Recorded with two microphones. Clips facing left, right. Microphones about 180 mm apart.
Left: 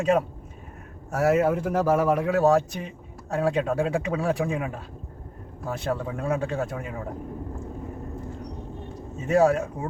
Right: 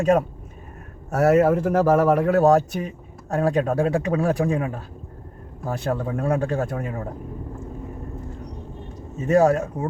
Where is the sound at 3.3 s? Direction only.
45° right (ahead or behind).